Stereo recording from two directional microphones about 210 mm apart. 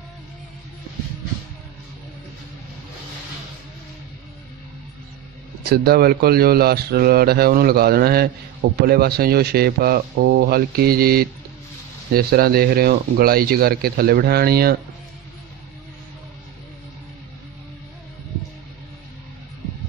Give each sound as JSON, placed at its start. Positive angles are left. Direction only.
{"t": 5.6, "sound": "a man's voice", "side_deg": -50}